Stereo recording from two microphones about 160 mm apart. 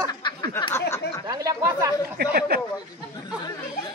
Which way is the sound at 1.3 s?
20° right (ahead or behind).